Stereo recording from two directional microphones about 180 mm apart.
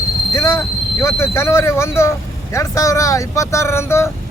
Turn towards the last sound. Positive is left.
turn(degrees=15)  # may be behind; listen again after turning